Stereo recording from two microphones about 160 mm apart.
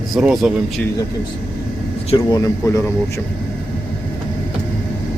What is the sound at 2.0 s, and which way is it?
Speech, 30° left (ahead or behind).